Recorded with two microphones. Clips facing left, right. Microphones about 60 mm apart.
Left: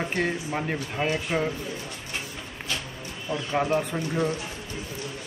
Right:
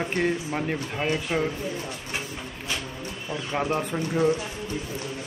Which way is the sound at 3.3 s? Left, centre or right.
Centre.